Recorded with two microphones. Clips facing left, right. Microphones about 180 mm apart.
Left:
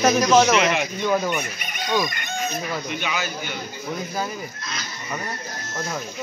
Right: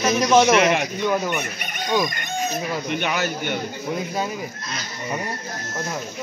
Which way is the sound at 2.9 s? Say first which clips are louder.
Right 4 dB; 55° right (ahead or behind).